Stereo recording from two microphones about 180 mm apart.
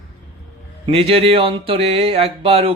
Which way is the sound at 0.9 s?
35° right (ahead or behind).